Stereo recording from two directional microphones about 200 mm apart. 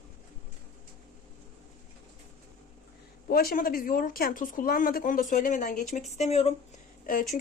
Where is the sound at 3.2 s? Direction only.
50° left (ahead or behind); by 6.6 s 30° left (ahead or behind).